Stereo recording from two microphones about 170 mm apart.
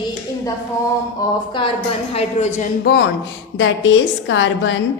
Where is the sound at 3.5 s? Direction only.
90° left.